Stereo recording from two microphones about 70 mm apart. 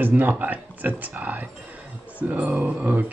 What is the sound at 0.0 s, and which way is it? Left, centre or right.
Speech, right.